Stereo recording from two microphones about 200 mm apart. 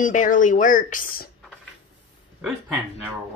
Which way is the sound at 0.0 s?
40° left (ahead or behind).